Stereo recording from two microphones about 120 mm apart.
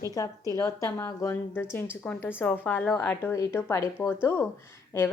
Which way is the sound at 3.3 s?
25° left (ahead or behind).